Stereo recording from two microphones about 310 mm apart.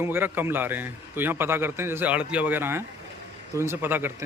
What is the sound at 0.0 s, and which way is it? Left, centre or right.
A man's voice, centre.